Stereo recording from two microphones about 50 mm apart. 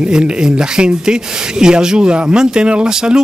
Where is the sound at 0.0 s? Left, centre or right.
Centre.